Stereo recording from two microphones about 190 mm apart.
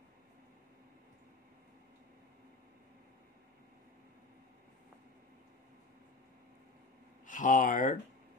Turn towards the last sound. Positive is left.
turn(degrees=45)  # may be behind; listen again after turning